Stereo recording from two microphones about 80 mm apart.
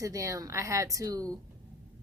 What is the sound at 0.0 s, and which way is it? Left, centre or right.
Speech, right.